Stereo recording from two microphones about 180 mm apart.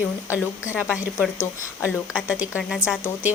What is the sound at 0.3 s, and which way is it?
Speech, 15° left (ahead or behind).